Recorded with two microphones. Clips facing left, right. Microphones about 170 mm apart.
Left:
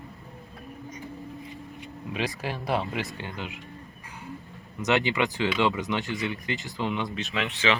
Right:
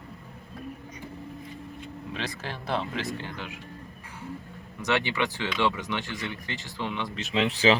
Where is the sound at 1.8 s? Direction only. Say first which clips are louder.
Left 4 dB; 10° left (ahead or behind).